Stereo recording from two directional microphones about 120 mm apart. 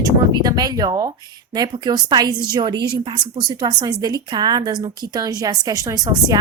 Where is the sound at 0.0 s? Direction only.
30° right (ahead or behind).